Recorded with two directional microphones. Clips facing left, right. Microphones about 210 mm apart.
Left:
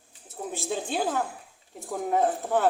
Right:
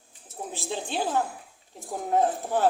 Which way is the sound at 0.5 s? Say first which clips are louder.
Left 2 dB; 50° left (ahead or behind).